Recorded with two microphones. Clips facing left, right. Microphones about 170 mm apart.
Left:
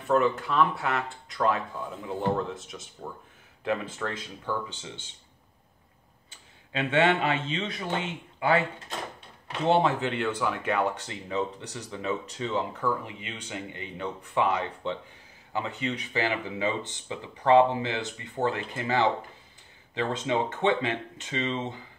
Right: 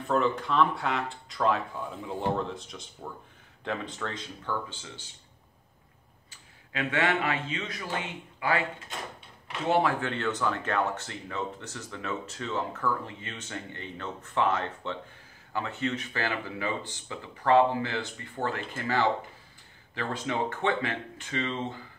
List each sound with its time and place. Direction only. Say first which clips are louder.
0.1 s speech: left 2 dB; 5° left (ahead or behind)
4.6 s speech: left 3 dB; 20° left (ahead or behind)
6.7 s speech: left 4 dB; 25° left (ahead or behind)
9.7 s speech: left 2 dB; 25° left (ahead or behind)